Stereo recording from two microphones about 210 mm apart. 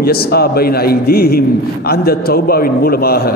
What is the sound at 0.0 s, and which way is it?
A man's voice, 50° left (ahead or behind).